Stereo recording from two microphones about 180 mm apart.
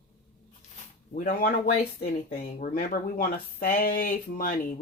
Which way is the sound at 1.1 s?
55° left (ahead or behind).